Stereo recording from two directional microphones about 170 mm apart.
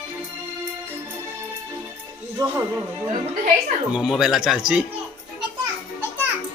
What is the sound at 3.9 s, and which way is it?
Speech, 5° right (ahead or behind).